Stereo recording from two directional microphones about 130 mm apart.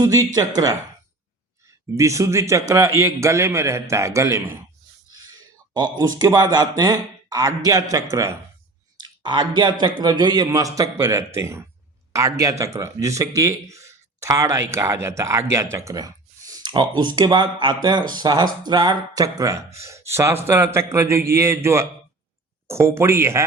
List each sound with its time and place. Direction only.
0.0 s speech: 30° right (ahead or behind)
2.0 s speech: 25° right (ahead or behind)
9.0 s speech: 35° right (ahead or behind); by 23.4 s 20° right (ahead or behind)